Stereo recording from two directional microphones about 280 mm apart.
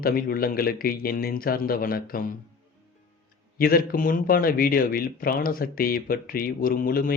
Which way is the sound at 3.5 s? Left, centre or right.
Left.